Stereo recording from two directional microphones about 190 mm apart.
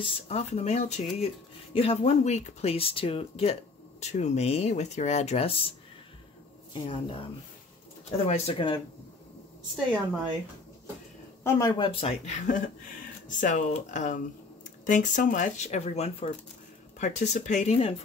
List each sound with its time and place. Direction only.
0.0 s speech: 35° left (ahead or behind)
6.7 s speech: 25° left (ahead or behind)
8.3 s speech: 30° left (ahead or behind)
11.4 s speech: 15° left (ahead or behind)
11.8 s speech: 30° left (ahead or behind)